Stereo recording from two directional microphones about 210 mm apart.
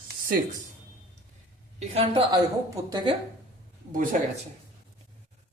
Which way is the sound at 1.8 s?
25° right (ahead or behind).